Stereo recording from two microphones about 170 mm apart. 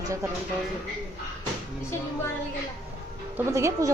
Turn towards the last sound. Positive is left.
turn(degrees=-15)  # may be behind; listen again after turning